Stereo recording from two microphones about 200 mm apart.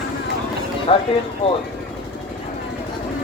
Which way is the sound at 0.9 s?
25° left (ahead or behind).